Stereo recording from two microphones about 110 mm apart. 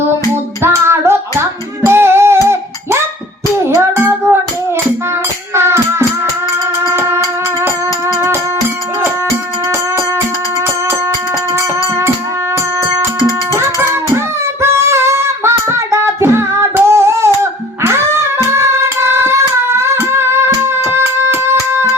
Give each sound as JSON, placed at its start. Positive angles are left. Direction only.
{"t": 0.6, "sound": "music", "side_deg": -25}
{"t": 5.5, "sound": "music", "side_deg": -25}
{"t": 13.5, "sound": "music", "side_deg": -25}